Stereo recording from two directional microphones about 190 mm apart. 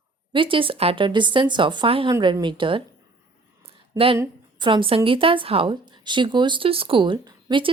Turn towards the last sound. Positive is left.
turn(degrees=-25)  # may be behind; listen again after turning